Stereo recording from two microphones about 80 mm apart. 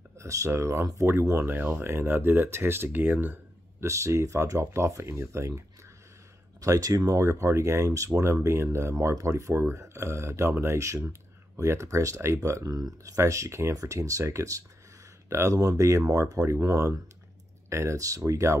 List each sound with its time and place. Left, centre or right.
0.2 s speech: right
3.8 s speech: right
6.6 s speech: right
8.9 s speech: right